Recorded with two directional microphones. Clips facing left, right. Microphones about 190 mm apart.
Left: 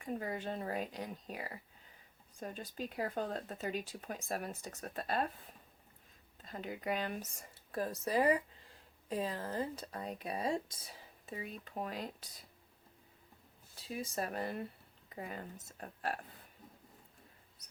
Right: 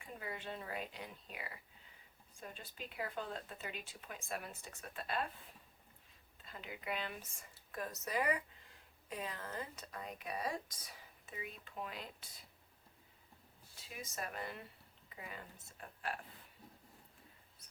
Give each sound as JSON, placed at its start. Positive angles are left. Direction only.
{"t": 0.0, "sound": "speech", "side_deg": 40}
{"t": 6.4, "sound": "speech", "side_deg": 45}
{"t": 11.3, "sound": "speech", "side_deg": 40}
{"t": 13.9, "sound": "speech", "side_deg": 35}